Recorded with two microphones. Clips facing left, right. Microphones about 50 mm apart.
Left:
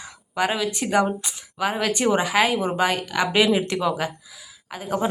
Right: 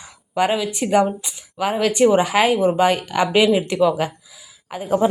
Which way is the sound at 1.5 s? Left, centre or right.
Centre.